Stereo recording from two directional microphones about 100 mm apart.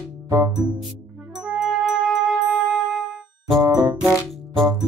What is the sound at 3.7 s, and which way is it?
Music, 45° right (ahead or behind).